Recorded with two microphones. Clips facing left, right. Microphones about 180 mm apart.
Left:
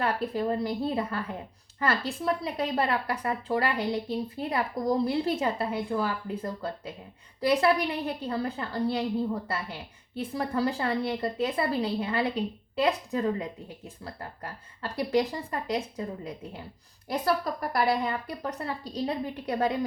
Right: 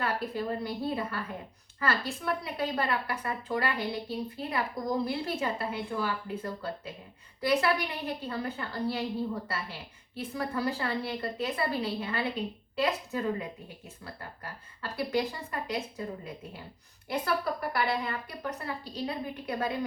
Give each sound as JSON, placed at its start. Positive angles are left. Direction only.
{"t": 0.0, "sound": "a woman's voice", "side_deg": 30}